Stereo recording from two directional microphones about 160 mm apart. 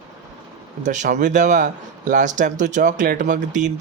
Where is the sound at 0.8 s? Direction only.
50° right (ahead or behind).